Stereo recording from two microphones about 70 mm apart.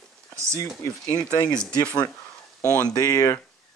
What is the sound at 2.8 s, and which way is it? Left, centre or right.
Speech, left.